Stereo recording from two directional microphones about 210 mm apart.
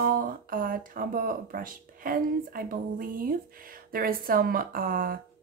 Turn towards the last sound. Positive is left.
turn(degrees=-45)  # may be behind; listen again after turning